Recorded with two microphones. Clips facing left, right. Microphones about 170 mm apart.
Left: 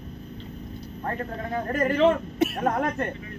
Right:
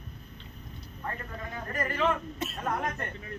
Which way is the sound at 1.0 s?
50° left (ahead or behind).